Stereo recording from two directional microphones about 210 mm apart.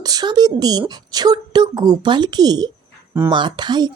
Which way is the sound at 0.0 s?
20° right (ahead or behind).